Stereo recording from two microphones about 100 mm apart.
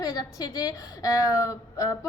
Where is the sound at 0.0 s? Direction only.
35° left (ahead or behind).